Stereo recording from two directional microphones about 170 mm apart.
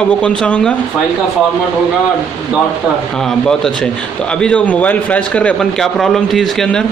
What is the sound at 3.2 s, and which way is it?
A man's voice, 5° left (ahead or behind).